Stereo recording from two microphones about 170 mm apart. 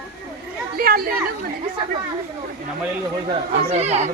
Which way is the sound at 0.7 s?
60° right (ahead or behind).